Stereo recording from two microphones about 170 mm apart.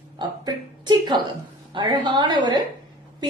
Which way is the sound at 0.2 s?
25° right (ahead or behind).